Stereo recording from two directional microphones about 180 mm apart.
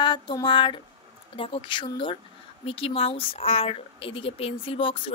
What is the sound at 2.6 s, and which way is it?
Speech, 35° left (ahead or behind).